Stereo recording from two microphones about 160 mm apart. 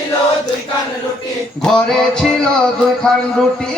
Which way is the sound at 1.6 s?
5° left (ahead or behind).